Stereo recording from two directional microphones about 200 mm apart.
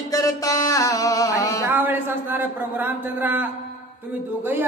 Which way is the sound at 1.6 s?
10° right (ahead or behind).